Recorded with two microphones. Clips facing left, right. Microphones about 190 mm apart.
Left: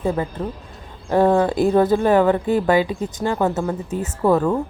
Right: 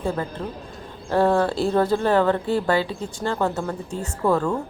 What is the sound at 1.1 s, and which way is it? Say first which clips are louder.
Speech: left 3 dB; 15° left (ahead or behind).